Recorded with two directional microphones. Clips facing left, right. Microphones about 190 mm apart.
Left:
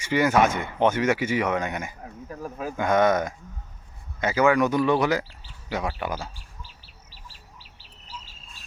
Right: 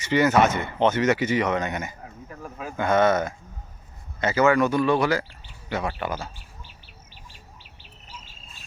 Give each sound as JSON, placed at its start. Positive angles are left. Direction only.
{"t": 0.0, "sound": "speech", "side_deg": 10}
{"t": 2.4, "sound": "speech", "side_deg": 40}
{"t": 2.7, "sound": "speech", "side_deg": 15}
{"t": 7.6, "sound": "bird", "side_deg": 35}